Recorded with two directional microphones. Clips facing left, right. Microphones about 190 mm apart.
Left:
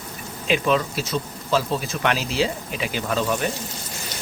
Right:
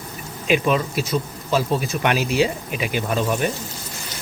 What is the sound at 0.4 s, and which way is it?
Speech, 15° right (ahead or behind).